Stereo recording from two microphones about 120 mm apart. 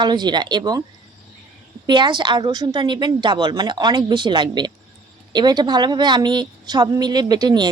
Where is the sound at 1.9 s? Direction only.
40° right (ahead or behind).